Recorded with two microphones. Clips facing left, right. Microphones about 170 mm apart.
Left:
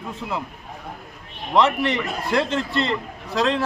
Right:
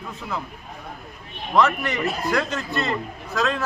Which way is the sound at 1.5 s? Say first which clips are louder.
Left 1 dB; 30° left (ahead or behind).